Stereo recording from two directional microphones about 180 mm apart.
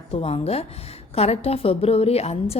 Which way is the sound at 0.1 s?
35° left (ahead or behind).